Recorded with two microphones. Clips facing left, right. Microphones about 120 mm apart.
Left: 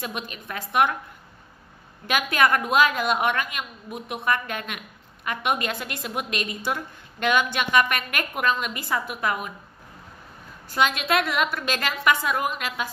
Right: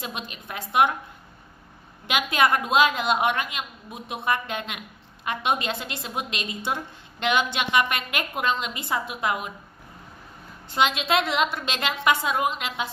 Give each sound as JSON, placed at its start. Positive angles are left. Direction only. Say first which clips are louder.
{"t": 0.0, "sound": "a woman's voice", "louder": "left 2 dB", "side_deg": -25}
{"t": 2.0, "sound": "a woman's voice", "louder": "even", "side_deg": -20}
{"t": 10.7, "sound": "a woman's voice", "louder": "even", "side_deg": -25}